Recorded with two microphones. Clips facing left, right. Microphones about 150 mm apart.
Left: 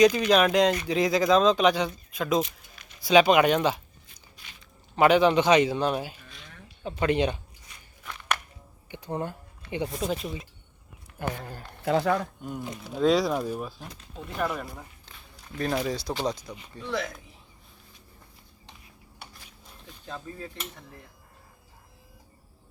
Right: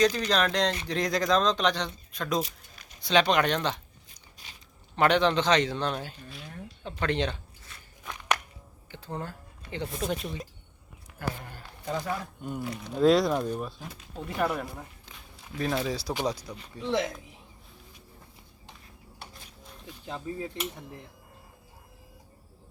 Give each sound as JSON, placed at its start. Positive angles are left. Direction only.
{"t": 0.0, "sound": "a man's voice", "side_deg": 10}
{"t": 4.1, "sound": "biting", "side_deg": -35}
{"t": 4.9, "sound": "a man's voice", "side_deg": 5}
{"t": 8.0, "sound": "walk", "side_deg": -15}
{"t": 8.9, "sound": "speech", "side_deg": 15}
{"t": 10.0, "sound": "speech", "side_deg": 0}
{"t": 11.2, "sound": "speech", "side_deg": 20}
{"t": 11.9, "sound": "speech", "side_deg": 75}
{"t": 12.4, "sound": "speech", "side_deg": 0}
{"t": 16.8, "sound": "speech", "side_deg": -20}
{"t": 20.1, "sound": "speech", "side_deg": -15}